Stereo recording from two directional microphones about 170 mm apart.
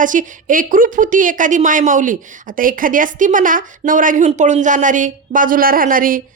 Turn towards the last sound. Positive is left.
turn(degrees=-55)  # may be behind; listen again after turning